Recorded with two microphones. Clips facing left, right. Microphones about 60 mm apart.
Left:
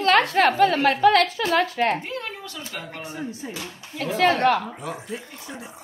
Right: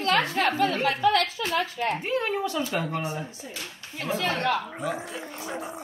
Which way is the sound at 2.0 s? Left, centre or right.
Right.